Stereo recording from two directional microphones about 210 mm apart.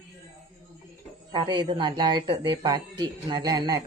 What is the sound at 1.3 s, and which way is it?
Speech, 20° right (ahead or behind).